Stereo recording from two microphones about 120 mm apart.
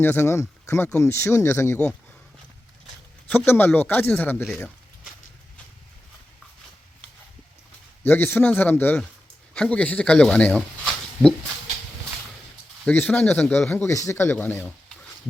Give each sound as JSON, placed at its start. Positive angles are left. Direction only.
{"t": 0.0, "sound": "speech", "side_deg": 20}
{"t": 3.2, "sound": "speech", "side_deg": 20}
{"t": 8.0, "sound": "speech", "side_deg": 15}
{"t": 12.8, "sound": "speech", "side_deg": 15}